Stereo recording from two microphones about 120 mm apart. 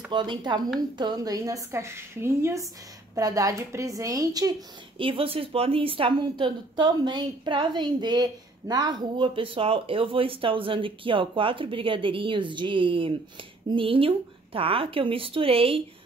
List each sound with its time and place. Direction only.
0.1 s a woman's voice: 40° right (ahead or behind)
4.9 s a woman's voice: 50° right (ahead or behind)